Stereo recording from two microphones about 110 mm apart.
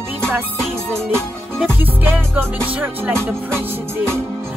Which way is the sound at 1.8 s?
15° right (ahead or behind).